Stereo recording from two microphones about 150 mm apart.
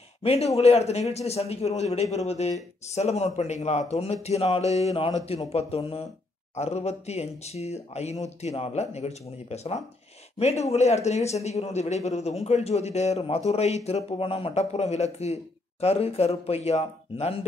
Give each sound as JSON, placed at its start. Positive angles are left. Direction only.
{"t": 0.2, "sound": "speech", "side_deg": 45}